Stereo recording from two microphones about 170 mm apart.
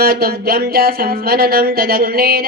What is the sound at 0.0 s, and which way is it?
Speech, 65° right (ahead or behind).